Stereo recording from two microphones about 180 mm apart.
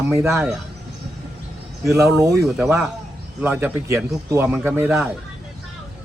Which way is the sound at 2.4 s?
Centre (ahead or behind).